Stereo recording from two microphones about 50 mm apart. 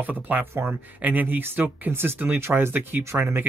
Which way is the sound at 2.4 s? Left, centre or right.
Right.